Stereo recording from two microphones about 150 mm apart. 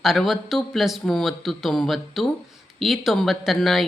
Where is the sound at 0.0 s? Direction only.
Centre (ahead or behind).